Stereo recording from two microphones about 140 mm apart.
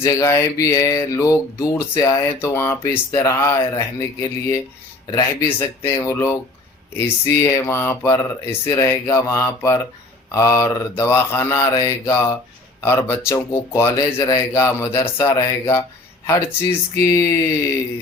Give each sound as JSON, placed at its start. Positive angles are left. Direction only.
{"t": 0.0, "sound": "speech", "side_deg": 20}